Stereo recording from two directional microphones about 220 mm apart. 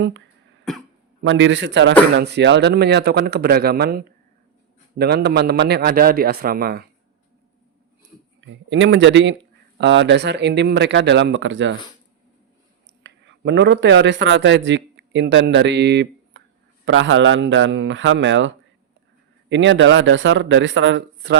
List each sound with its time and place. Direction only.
0.7 s speech: centre (ahead or behind)
1.2 s speech: 55° right (ahead or behind)
8.4 s speech: 55° right (ahead or behind)
13.0 s a man's voice: 55° right (ahead or behind)